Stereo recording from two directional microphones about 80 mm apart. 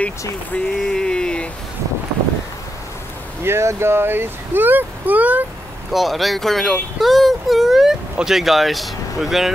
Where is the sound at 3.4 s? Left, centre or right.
Right.